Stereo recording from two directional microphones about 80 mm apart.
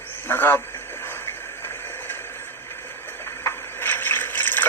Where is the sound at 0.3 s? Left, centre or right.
Left.